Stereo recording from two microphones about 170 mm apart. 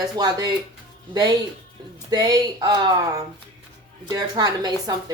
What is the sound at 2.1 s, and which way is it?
Speech, 20° right (ahead or behind).